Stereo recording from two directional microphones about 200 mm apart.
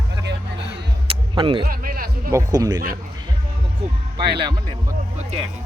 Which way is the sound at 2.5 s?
20° right (ahead or behind).